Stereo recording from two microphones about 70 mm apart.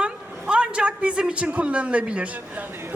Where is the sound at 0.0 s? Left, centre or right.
Centre.